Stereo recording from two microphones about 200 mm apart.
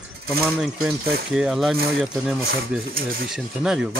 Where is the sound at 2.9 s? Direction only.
45° right (ahead or behind).